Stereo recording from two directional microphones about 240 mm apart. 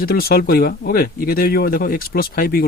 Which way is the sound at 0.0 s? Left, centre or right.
Left.